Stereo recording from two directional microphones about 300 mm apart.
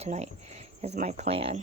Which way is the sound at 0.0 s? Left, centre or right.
Right.